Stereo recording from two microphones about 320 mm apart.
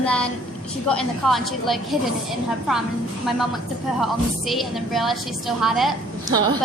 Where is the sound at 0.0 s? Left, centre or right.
Centre.